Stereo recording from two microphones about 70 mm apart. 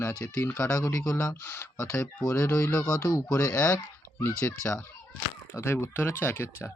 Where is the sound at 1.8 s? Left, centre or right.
Left.